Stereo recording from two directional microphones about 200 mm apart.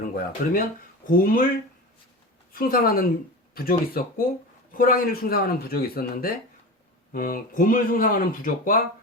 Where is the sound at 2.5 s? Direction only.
45° left (ahead or behind).